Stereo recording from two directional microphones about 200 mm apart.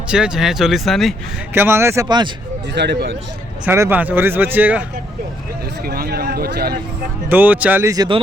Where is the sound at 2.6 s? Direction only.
60° right (ahead or behind).